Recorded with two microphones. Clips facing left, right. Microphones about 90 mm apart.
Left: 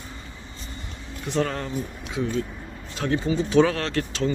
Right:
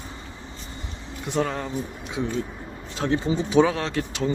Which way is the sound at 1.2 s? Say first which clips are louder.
Even; 15° right (ahead or behind).